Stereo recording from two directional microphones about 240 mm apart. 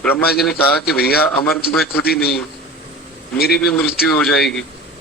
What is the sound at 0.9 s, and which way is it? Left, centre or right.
Speech, left.